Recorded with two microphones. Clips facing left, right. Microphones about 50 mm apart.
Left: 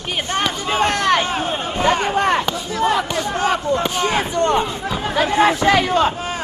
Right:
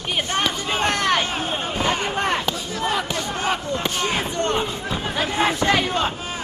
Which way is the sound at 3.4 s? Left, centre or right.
Left.